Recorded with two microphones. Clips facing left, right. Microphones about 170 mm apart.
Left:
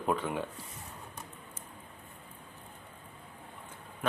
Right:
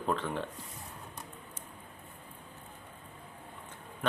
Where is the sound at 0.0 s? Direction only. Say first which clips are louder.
Left 1 dB; 10° left (ahead or behind).